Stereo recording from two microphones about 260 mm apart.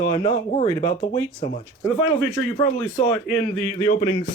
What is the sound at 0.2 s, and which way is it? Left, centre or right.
Speech, left.